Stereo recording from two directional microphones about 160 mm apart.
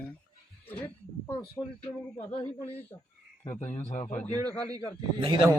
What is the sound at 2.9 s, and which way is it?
Speech, 25° left (ahead or behind).